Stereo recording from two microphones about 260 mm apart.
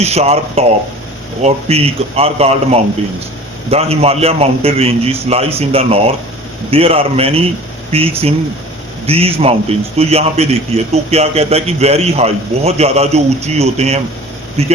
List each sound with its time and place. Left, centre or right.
0.0 s a man's voice: right